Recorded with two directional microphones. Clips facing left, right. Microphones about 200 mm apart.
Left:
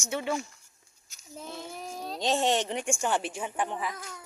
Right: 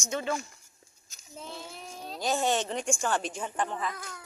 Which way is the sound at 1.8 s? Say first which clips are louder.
Left 4 dB; 40° left (ahead or behind).